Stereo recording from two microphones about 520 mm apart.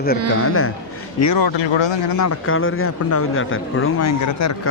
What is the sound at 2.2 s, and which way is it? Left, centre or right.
Speech, left.